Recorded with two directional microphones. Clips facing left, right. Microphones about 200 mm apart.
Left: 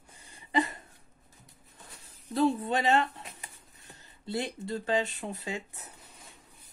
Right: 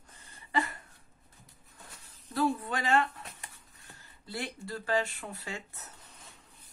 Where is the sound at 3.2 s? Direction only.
Centre (ahead or behind).